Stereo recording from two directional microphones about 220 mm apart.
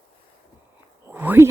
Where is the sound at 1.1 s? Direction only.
10° right (ahead or behind).